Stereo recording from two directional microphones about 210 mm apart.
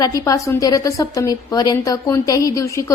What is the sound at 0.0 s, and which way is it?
A woman's voice, 15° left (ahead or behind).